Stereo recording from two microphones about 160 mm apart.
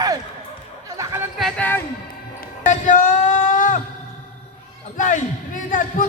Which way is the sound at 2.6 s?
50° left (ahead or behind).